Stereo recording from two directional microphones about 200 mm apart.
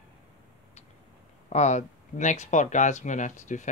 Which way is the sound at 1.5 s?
35° left (ahead or behind).